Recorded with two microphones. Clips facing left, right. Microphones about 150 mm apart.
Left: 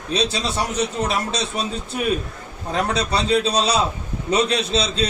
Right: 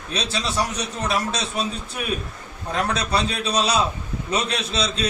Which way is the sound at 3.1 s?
30° left (ahead or behind).